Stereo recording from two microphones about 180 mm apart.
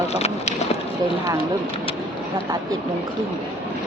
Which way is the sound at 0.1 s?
35° left (ahead or behind).